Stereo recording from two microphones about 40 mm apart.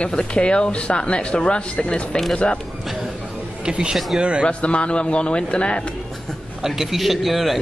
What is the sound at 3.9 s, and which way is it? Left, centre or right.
Speech, centre.